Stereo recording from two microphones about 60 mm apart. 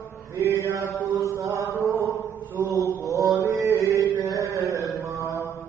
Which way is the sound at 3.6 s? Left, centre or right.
Right.